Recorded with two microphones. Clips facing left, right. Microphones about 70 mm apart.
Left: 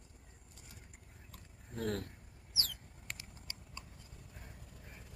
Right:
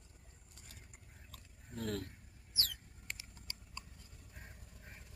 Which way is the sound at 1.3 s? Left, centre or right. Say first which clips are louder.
Left 2 dB; left.